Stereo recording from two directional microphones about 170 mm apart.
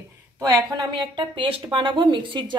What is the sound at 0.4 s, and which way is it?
Speech, 25° right (ahead or behind).